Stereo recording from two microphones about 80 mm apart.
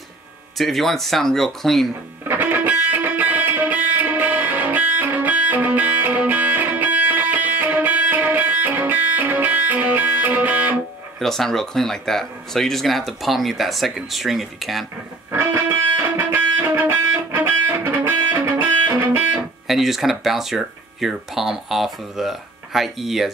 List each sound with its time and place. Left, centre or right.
0.6 s speech: centre
2.2 s music: right
11.1 s speech: centre
16.2 s music: right
19.7 s speech: centre